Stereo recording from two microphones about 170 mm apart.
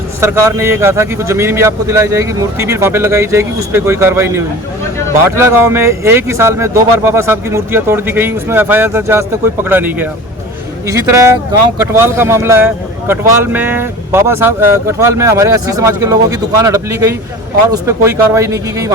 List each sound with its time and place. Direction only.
0.2 s a man's voice: 15° right (ahead or behind)